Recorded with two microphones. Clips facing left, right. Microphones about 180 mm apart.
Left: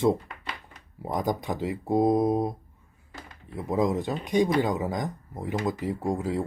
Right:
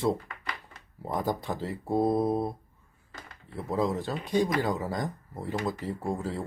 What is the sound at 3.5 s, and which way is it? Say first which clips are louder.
Speech: left 3 dB; 15° left (ahead or behind).